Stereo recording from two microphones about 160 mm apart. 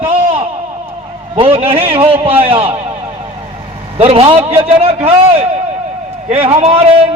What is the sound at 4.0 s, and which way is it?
A man's voice, 40° right (ahead or behind).